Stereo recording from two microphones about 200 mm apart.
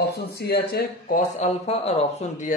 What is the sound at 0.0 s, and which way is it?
Speech, 55° left (ahead or behind).